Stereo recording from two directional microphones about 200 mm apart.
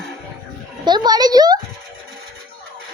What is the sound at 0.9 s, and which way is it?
Speech, 20° right (ahead or behind).